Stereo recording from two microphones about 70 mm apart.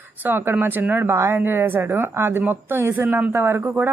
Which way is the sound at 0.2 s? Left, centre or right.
Right.